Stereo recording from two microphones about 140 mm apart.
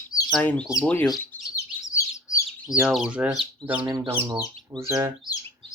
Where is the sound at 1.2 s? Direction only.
15° left (ahead or behind).